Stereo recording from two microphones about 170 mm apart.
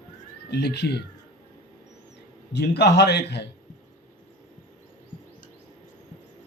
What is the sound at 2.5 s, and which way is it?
Speech, 80° left.